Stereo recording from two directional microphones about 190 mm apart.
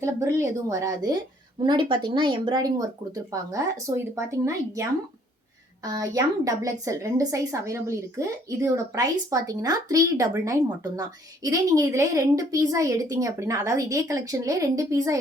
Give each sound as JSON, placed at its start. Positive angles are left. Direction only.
{"t": 0.0, "sound": "a woman's voice", "side_deg": -15}